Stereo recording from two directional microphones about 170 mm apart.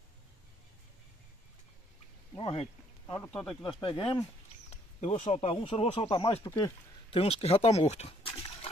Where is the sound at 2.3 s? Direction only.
35° left (ahead or behind).